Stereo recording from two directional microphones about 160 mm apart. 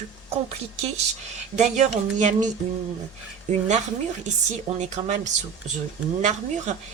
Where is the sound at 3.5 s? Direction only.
45° right (ahead or behind).